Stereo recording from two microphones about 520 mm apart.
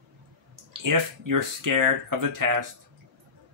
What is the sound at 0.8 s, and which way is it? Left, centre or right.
Speech, right.